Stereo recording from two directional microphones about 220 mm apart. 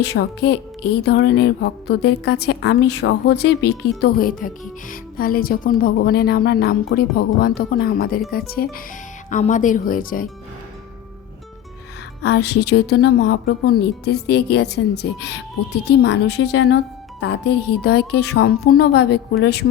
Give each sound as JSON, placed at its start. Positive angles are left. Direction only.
{"t": 0.0, "sound": "speech", "side_deg": 50}
{"t": 12.2, "sound": "speech", "side_deg": 50}